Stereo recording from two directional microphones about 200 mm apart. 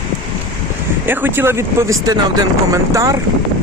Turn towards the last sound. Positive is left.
turn(degrees=-15)  # may be behind; listen again after turning